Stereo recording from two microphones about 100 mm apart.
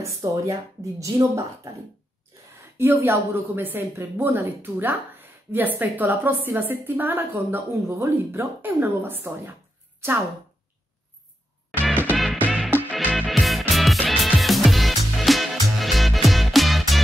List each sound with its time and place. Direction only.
0.0 s speech: 30° right (ahead or behind)
2.8 s speech: 25° right (ahead or behind)
11.7 s music: 15° left (ahead or behind)
13.1 s music: centre (ahead or behind)